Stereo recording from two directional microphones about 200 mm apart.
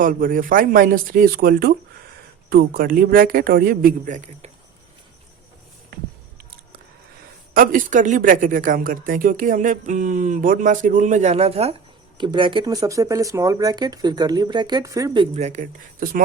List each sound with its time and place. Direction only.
0.0 s a man's voice: 45° right (ahead or behind)
7.5 s speech: 45° right (ahead or behind)